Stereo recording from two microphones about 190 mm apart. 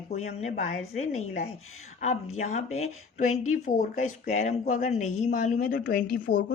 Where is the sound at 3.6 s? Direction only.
40° left (ahead or behind).